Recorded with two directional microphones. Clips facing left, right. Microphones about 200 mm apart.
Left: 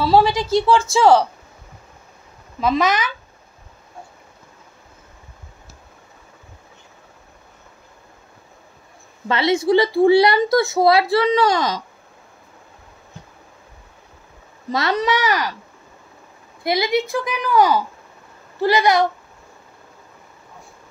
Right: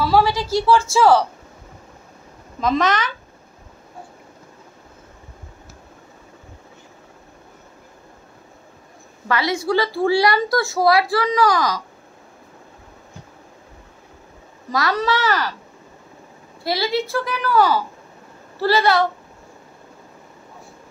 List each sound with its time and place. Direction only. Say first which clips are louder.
0.0 s a woman's voice: left 2 dB; 25° left (ahead or behind)
2.6 s a woman's voice: left 1 dB; 5° left (ahead or behind)
9.3 s a woman's voice: left 4 dB; 25° left (ahead or behind)
14.7 s a woman's voice: left 1 dB; 25° left (ahead or behind)
16.6 s a woman's voice: left 2 dB; 20° left (ahead or behind)